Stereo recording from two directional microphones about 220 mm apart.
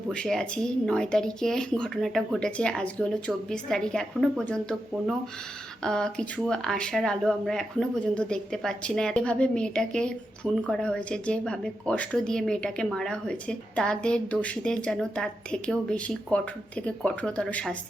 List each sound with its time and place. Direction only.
0.1 s speech: 5° left (ahead or behind)